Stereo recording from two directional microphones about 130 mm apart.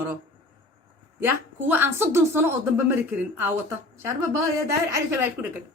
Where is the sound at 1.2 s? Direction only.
15° right (ahead or behind).